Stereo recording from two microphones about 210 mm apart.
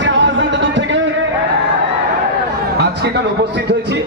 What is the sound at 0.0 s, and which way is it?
Music, 60° right (ahead or behind).